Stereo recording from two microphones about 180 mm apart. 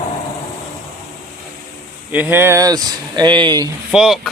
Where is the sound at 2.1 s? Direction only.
10° right (ahead or behind).